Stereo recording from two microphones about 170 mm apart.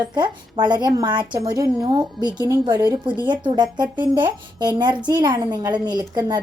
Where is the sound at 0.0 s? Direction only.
25° right (ahead or behind).